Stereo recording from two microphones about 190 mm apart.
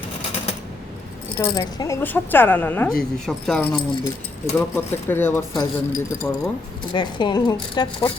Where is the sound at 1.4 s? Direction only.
20° left (ahead or behind).